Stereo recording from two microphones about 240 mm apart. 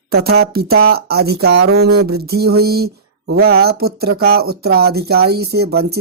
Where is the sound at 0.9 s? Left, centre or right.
Right.